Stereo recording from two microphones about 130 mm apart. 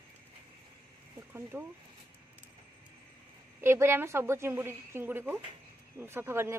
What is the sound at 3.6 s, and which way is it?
A woman's voice, 20° right (ahead or behind).